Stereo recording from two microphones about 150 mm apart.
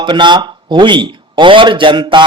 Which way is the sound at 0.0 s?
30° right (ahead or behind).